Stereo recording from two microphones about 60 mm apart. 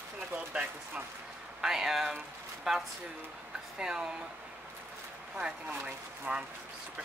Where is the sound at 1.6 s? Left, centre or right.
Centre.